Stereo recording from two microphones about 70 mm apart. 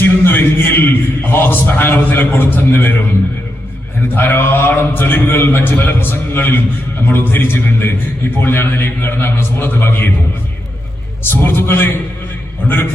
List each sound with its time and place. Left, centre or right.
0.0 s a man's voice: left
4.1 s a man's voice: left
11.2 s a man's voice: left